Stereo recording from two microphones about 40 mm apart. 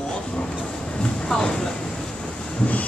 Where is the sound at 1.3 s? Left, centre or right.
Centre.